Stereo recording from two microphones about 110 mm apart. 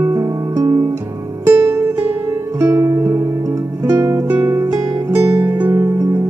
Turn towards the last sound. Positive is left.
turn(degrees=-30)  # may be behind; listen again after turning